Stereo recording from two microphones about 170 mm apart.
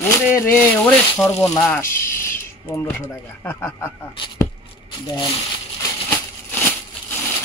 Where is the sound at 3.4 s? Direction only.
15° left (ahead or behind).